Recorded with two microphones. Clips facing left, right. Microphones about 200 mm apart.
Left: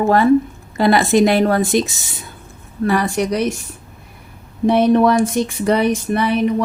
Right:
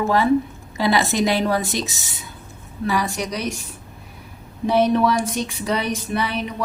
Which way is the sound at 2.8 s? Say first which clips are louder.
Left 6 dB; 55° left (ahead or behind).